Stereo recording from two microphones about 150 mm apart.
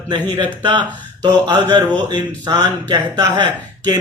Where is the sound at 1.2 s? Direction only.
30° right (ahead or behind).